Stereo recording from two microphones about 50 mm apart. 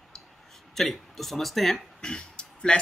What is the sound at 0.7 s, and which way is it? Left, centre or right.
Speech, centre.